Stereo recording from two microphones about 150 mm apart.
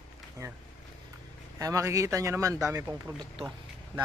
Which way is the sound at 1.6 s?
20° right (ahead or behind).